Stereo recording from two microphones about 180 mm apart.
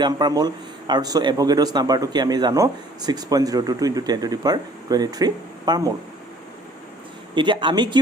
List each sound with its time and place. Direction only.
0.0 s speech: 25° right (ahead or behind)
7.3 s speech: 25° right (ahead or behind)